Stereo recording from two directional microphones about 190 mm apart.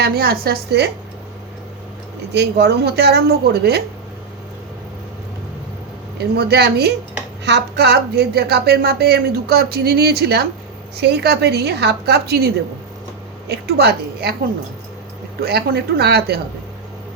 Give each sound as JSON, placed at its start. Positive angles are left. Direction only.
{"t": 0.0, "sound": "a woman's voice", "side_deg": -55}
{"t": 2.3, "sound": "a woman's voice", "side_deg": -60}
{"t": 6.3, "sound": "a woman's voice", "side_deg": -55}
{"t": 13.5, "sound": "a woman's voice", "side_deg": -55}
{"t": 15.4, "sound": "a woman's voice", "side_deg": -55}